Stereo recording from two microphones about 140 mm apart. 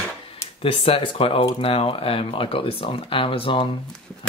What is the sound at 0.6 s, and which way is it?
Speech, 40° left (ahead or behind).